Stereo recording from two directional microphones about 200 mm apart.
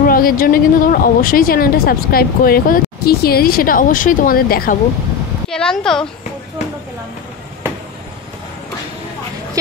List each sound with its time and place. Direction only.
0.0 s a woman's voice: 45° left (ahead or behind)
5.5 s speech: 5° left (ahead or behind)